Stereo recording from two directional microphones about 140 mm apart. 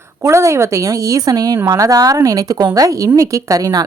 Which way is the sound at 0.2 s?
20° right (ahead or behind).